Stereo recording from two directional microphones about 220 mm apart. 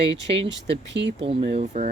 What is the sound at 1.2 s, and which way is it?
Speech, 25° right (ahead or behind).